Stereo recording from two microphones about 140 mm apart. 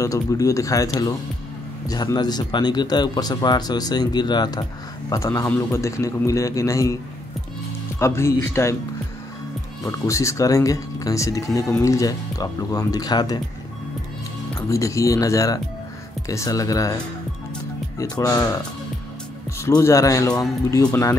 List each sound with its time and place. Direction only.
0.0 s speech: 20° left (ahead or behind)
8.0 s speech: 20° left (ahead or behind)
9.8 s speech: 20° left (ahead or behind)
14.7 s speech: 25° left (ahead or behind)
19.6 s speech: 20° left (ahead or behind)